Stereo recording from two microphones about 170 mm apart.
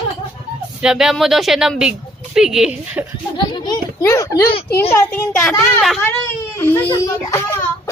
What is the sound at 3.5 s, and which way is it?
A child's voice, 25° left (ahead or behind).